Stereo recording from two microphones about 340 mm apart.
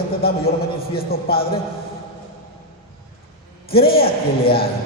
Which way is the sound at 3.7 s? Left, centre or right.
Left.